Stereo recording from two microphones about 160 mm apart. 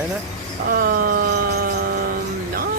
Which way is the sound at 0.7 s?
65° right (ahead or behind).